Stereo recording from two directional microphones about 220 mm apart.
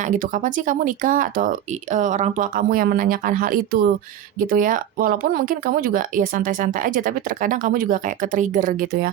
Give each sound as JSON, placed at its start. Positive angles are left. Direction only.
{"t": 0.0, "sound": "speech", "side_deg": -35}